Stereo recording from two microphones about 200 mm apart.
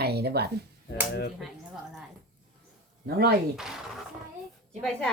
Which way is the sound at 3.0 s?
50° right (ahead or behind).